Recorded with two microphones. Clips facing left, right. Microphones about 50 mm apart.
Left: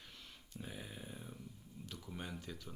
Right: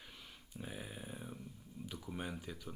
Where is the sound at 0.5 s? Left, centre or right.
Centre.